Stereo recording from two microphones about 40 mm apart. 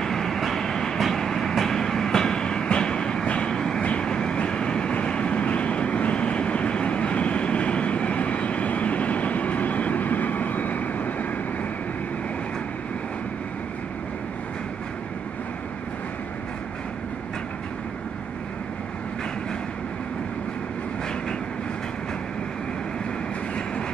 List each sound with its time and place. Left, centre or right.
0.0 s train: centre
3.3 s vehicle: left
3.8 s train: left
4.9 s vehicle: left